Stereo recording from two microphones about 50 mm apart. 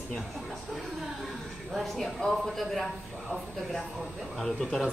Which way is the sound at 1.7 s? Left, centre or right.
Centre.